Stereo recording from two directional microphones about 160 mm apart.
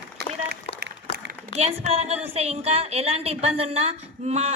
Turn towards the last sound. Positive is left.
turn(degrees=-40)  # may be behind; listen again after turning